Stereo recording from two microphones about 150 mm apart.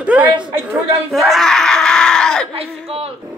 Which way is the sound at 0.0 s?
10° right (ahead or behind).